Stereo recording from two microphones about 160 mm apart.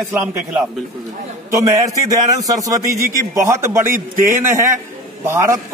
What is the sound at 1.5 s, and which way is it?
A man's voice, 20° right (ahead or behind).